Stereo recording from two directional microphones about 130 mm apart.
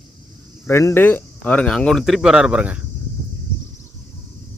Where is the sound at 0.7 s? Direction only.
20° left (ahead or behind); by 2.8 s 10° right (ahead or behind).